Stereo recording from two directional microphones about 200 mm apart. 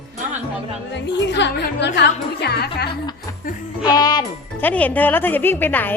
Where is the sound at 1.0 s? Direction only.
60° left (ahead or behind).